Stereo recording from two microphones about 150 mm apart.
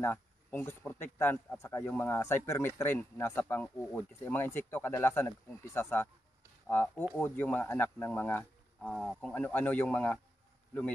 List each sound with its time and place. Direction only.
0.0 s speech: 10° left (ahead or behind)